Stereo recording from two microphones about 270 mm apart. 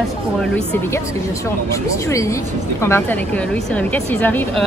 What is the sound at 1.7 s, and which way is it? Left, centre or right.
A woman's voice, centre.